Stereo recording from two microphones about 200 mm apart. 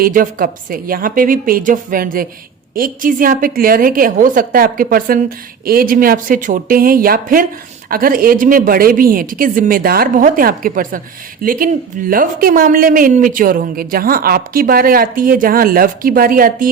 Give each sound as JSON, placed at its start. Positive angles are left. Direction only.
{"t": 0.0, "sound": "a woman's voice", "side_deg": -45}